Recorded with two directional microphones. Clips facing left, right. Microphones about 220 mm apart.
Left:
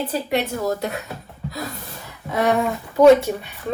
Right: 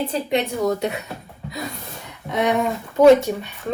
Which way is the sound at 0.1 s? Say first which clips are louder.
Right 1 dB; 5° left (ahead or behind).